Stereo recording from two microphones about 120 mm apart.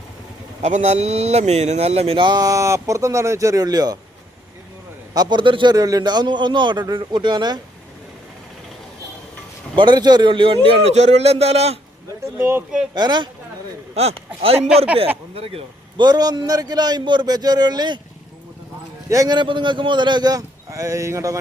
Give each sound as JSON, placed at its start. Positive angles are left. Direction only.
{"t": 0.6, "sound": "speech", "side_deg": -70}
{"t": 5.1, "sound": "speech", "side_deg": -35}
{"t": 9.7, "sound": "a man's voice", "side_deg": -40}
{"t": 12.4, "sound": "speech", "side_deg": -20}
{"t": 12.9, "sound": "speech", "side_deg": -40}
{"t": 13.9, "sound": "a man's voice", "side_deg": -60}
{"t": 16.0, "sound": "speech", "side_deg": -35}
{"t": 19.0, "sound": "a man's voice", "side_deg": -30}
{"t": 19.4, "sound": "speech", "side_deg": -40}